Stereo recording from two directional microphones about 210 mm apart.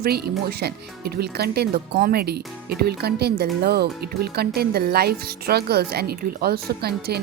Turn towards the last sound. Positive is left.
turn(degrees=-50)  # may be behind; listen again after turning